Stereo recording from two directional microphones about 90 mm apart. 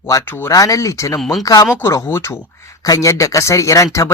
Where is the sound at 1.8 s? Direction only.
30° left (ahead or behind).